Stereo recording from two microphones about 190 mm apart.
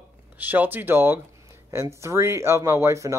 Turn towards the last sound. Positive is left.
turn(degrees=-15)  # may be behind; listen again after turning